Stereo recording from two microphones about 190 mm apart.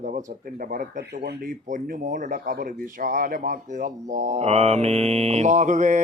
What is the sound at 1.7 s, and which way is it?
Speech, 45° right (ahead or behind).